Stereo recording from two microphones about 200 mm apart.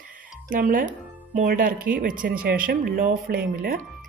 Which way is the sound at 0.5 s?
45° right (ahead or behind).